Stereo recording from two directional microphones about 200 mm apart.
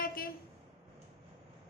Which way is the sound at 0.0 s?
45° left (ahead or behind).